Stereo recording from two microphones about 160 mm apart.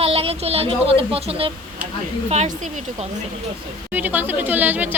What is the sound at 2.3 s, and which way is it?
Speech, 45° right (ahead or behind).